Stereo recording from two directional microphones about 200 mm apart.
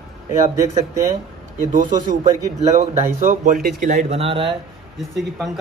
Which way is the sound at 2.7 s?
40° right (ahead or behind).